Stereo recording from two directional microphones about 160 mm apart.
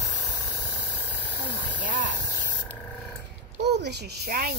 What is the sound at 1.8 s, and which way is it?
Speech, 55° right (ahead or behind).